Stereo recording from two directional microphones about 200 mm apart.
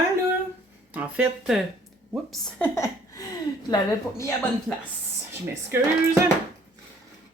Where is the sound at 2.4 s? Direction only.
10° left (ahead or behind).